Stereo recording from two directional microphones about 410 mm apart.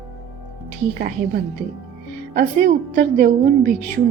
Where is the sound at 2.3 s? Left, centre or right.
Right.